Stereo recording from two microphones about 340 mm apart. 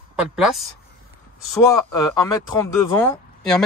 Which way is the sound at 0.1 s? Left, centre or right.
Centre.